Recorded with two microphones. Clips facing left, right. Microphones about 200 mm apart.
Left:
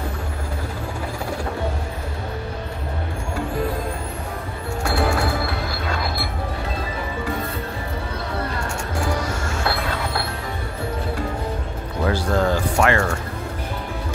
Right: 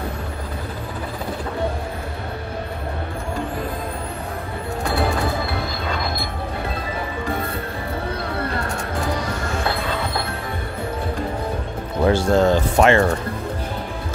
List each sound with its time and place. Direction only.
4.8 s music: 10° left (ahead or behind)
9.7 s train: 10° left (ahead or behind)
12.1 s music: 25° right (ahead or behind)